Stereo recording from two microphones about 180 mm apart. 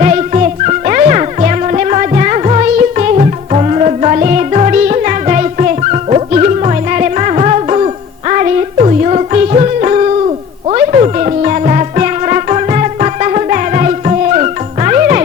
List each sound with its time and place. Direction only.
0.0 s music: 45° right (ahead or behind)